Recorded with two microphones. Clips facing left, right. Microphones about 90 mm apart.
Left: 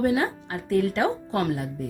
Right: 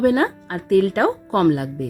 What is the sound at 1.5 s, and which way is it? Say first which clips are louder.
Speech: right 6 dB; 80° right.